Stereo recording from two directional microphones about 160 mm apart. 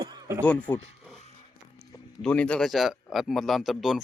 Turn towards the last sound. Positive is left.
turn(degrees=0)  # may be behind; listen again after turning